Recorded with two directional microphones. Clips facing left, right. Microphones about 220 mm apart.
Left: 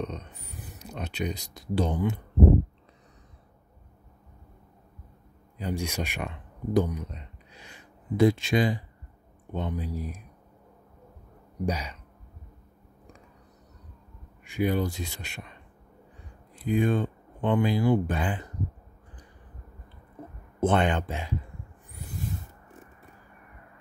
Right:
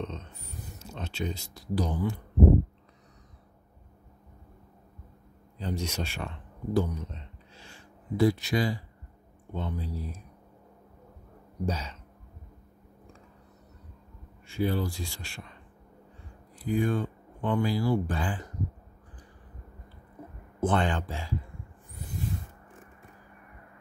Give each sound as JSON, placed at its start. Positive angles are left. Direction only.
{"t": 0.0, "sound": "a sound", "side_deg": 15}
{"t": 5.6, "sound": "speech", "side_deg": 10}
{"t": 11.6, "sound": "speech", "side_deg": 15}
{"t": 14.4, "sound": "speech", "side_deg": 15}
{"t": 16.5, "sound": "speech", "side_deg": 20}
{"t": 20.6, "sound": "speech", "side_deg": 20}